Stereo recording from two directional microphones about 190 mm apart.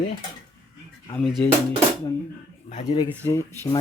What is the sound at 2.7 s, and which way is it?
Speech, 35° left (ahead or behind).